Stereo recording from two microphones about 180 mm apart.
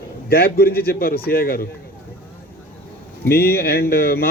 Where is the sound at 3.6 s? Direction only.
60° left (ahead or behind).